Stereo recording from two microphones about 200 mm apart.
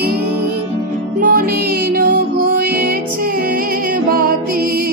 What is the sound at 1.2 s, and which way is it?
Music, 45° right (ahead or behind).